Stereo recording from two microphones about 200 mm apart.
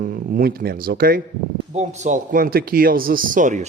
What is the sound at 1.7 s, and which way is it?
A man's voice, 35° right (ahead or behind).